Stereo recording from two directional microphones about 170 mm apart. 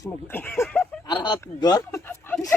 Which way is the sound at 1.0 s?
25° left (ahead or behind).